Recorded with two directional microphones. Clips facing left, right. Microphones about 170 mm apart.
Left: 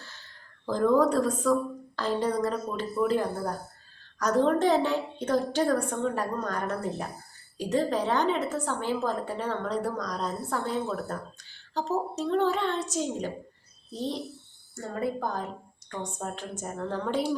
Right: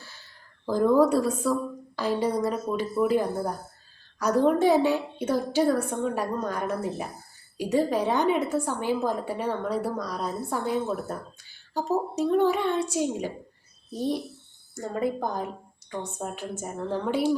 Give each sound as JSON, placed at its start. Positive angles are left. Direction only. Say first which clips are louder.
{"t": 0.6, "sound": "a woman's voice", "louder": "right 2 dB", "side_deg": -10}